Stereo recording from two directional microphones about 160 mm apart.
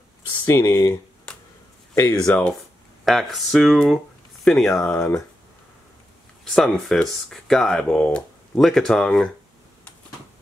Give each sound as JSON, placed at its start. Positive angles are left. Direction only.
{"t": 0.5, "sound": "speech", "side_deg": 20}
{"t": 2.0, "sound": "speech", "side_deg": 15}
{"t": 4.9, "sound": "speech", "side_deg": 15}
{"t": 6.5, "sound": "speech", "side_deg": 0}